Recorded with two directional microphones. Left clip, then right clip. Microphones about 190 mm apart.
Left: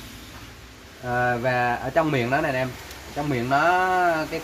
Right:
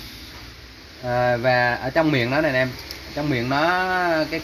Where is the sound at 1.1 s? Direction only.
40° right (ahead or behind).